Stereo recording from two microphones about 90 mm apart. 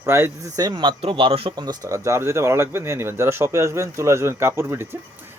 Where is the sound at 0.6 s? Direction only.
55° right (ahead or behind); by 1.5 s 85° right.